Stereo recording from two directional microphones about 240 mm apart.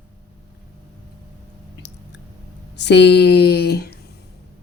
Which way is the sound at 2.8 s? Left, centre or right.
Left.